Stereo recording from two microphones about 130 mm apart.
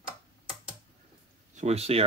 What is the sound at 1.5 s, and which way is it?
Speech, 55° right (ahead or behind).